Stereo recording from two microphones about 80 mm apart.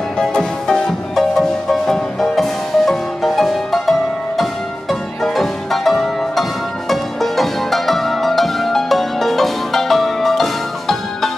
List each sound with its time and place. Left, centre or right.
0.2 s music: centre